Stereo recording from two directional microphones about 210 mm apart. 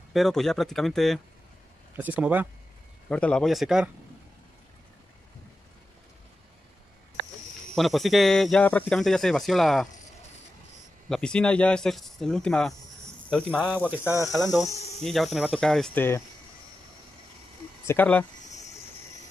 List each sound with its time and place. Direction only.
0.1 s speech: centre (ahead or behind)
3.1 s speech: 5° left (ahead or behind)
7.7 s speech: centre (ahead or behind)
11.1 s speech: 5° left (ahead or behind)
14.3 s speech: centre (ahead or behind)
17.8 s speech: 10° left (ahead or behind)
18.5 s cricket: 35° left (ahead or behind)